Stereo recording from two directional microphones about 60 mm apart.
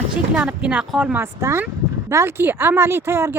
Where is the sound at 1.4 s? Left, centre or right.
Right.